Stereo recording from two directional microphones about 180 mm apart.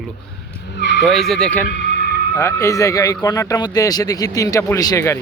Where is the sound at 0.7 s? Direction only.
80° left.